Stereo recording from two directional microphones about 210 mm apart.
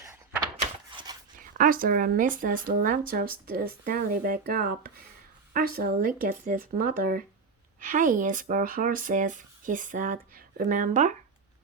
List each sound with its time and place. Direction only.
1.4 s speech: 40° right (ahead or behind)